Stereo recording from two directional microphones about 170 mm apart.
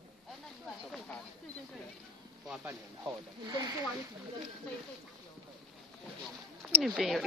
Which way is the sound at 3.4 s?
25° right (ahead or behind).